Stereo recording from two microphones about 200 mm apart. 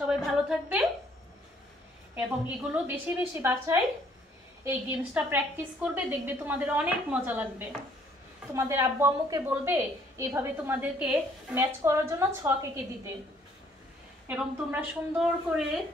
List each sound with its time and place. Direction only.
0.1 s a woman's voice: centre (ahead or behind)
2.1 s a woman's voice: 10° right (ahead or behind)
14.2 s a woman's voice: 10° right (ahead or behind)